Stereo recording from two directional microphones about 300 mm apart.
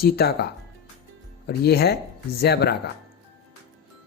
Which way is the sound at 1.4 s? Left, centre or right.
Left.